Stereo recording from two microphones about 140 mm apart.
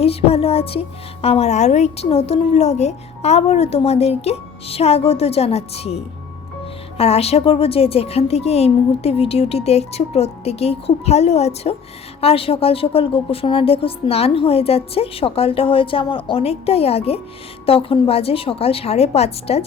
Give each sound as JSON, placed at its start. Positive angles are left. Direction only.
{"t": 0.0, "sound": "a woman's voice", "side_deg": 45}